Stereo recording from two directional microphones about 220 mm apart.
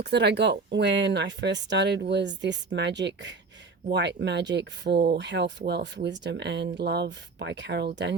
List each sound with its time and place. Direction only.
0.0 s speech: 50° right (ahead or behind)